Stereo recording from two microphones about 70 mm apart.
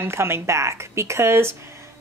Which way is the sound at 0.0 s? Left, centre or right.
Right.